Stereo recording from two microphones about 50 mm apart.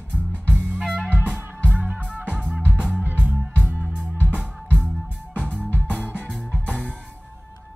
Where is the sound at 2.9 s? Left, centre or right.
Right.